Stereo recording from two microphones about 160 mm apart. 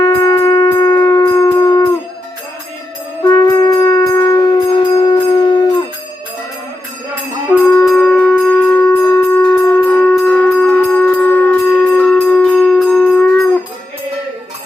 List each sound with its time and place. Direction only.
0.0 s shofar: 20° left (ahead or behind)
3.2 s music: 20° left (ahead or behind)
7.5 s music: 15° left (ahead or behind)